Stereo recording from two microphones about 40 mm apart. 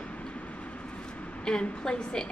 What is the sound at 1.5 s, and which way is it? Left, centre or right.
Speech, left.